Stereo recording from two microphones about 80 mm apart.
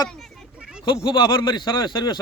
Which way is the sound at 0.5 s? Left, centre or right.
Centre.